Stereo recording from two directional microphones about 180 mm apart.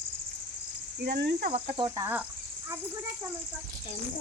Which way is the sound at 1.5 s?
30° right (ahead or behind).